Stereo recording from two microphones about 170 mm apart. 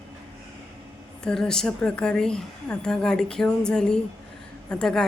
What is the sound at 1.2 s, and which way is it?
A woman's voice, 5° left (ahead or behind).